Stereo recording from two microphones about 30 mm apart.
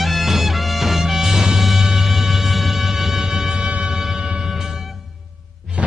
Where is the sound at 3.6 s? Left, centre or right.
Right.